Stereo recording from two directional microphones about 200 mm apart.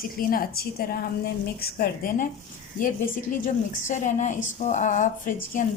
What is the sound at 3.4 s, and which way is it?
A woman's voice, 40° left (ahead or behind).